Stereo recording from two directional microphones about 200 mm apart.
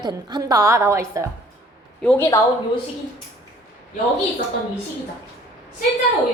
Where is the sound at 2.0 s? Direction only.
10° left (ahead or behind).